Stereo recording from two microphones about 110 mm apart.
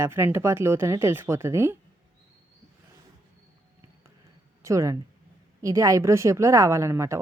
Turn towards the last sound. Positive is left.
turn(degrees=-25)  # may be behind; listen again after turning